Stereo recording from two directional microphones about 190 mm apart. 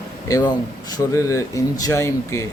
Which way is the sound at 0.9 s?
15° left (ahead or behind).